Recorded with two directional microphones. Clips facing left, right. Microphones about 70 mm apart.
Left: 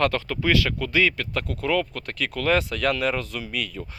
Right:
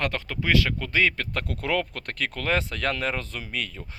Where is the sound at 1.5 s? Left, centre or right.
Right.